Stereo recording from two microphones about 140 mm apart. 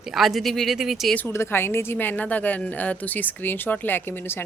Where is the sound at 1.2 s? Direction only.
15° left (ahead or behind).